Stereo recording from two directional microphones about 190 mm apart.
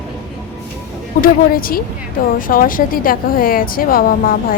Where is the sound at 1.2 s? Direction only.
50° left (ahead or behind).